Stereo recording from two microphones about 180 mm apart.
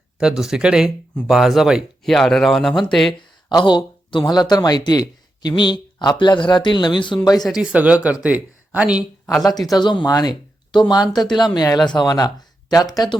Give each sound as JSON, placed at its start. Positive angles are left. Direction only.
{"t": 0.2, "sound": "speech", "side_deg": -5}
{"t": 3.6, "sound": "speech", "side_deg": 25}
{"t": 7.4, "sound": "speech", "side_deg": -5}
{"t": 9.6, "sound": "speech", "side_deg": 25}